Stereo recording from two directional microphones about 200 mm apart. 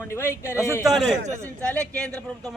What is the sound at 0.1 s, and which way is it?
Speech, 10° left (ahead or behind).